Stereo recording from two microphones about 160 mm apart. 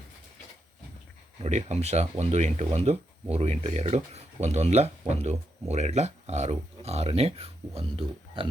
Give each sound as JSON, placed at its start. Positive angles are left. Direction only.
{"t": 1.4, "sound": "speech", "side_deg": -45}